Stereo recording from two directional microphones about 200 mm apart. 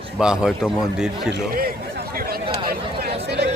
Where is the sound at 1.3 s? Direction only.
45° right (ahead or behind).